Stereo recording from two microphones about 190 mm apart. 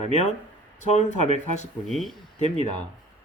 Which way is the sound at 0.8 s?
40° left (ahead or behind).